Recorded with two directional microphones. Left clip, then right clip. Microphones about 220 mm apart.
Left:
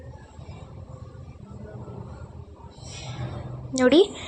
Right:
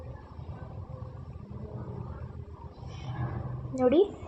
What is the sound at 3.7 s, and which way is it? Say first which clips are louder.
Speech: left 6 dB; 15° left (ahead or behind).